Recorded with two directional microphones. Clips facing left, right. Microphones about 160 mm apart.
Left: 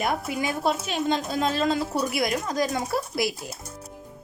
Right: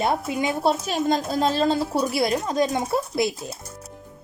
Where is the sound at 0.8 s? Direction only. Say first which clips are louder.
Right 3 dB; 40° right (ahead or behind); by 3.3 s 25° right (ahead or behind).